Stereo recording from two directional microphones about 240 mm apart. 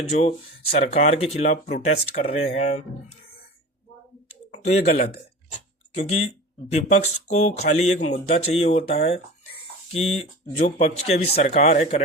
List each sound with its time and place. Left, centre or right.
0.1 s speech: left
4.3 s a sound: left
6.7 s speech: left